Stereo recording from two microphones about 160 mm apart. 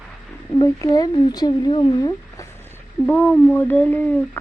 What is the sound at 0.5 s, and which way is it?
Speech, 20° left (ahead or behind).